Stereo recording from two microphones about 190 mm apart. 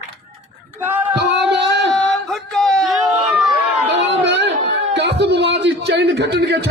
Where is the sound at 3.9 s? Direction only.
70° right (ahead or behind).